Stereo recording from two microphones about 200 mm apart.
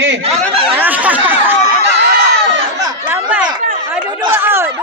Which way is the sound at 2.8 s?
20° right (ahead or behind).